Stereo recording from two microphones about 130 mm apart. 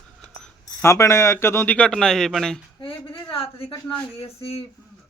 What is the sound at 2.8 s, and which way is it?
A woman's voice, 45° left (ahead or behind).